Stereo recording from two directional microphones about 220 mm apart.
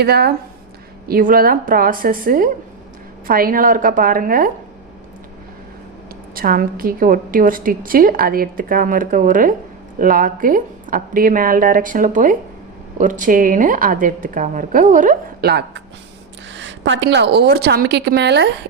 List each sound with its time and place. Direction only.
0.0 s a woman's voice: 45° right (ahead or behind)
6.3 s a woman's voice: 40° right (ahead or behind)